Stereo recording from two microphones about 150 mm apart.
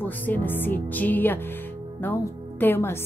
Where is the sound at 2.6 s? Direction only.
15° left (ahead or behind).